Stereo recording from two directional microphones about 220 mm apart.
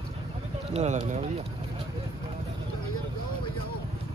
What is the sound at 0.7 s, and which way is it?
Speech, 30° right (ahead or behind).